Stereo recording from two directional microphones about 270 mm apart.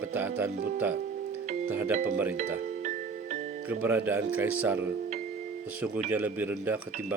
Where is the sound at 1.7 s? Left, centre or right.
Centre.